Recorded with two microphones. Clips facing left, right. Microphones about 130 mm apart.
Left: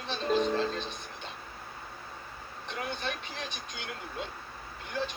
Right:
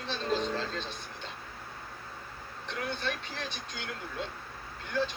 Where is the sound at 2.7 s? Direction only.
15° left (ahead or behind).